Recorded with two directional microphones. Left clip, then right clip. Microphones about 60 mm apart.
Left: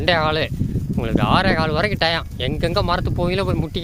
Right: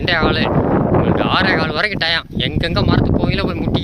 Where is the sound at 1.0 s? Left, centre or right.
Left.